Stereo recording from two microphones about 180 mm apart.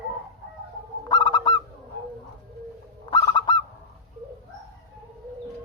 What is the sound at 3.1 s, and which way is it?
Bird, 25° left (ahead or behind).